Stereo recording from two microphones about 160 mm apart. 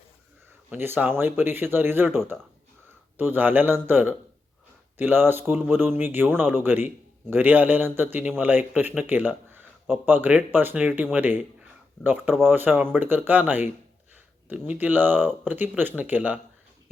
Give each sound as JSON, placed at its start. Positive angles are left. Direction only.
{"t": 0.7, "sound": "a man's voice", "side_deg": -10}
{"t": 3.2, "sound": "a man's voice", "side_deg": -10}